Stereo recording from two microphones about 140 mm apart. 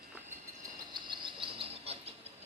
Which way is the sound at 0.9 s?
35° right (ahead or behind).